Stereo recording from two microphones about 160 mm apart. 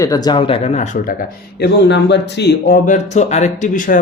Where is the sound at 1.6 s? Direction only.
90° left.